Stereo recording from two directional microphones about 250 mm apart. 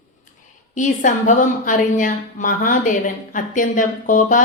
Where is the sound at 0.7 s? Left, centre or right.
Left.